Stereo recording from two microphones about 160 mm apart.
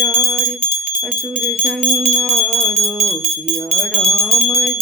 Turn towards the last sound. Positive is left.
turn(degrees=0)  # may be behind; listen again after turning